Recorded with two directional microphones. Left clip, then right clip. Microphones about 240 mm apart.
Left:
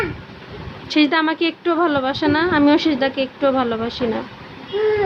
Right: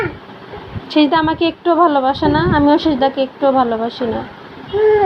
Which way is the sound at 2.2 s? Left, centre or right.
Left.